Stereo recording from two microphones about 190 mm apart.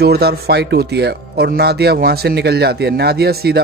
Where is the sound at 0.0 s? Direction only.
55° right (ahead or behind).